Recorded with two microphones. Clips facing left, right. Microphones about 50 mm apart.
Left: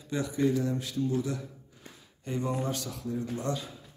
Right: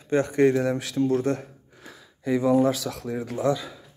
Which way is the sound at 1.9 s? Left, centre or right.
Right.